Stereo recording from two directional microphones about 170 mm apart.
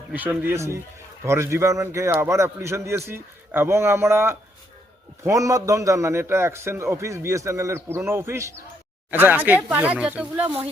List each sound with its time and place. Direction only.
0.1 s a man's voice: 10° right (ahead or behind)